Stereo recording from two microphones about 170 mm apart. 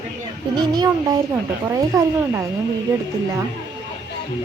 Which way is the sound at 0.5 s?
25° right (ahead or behind).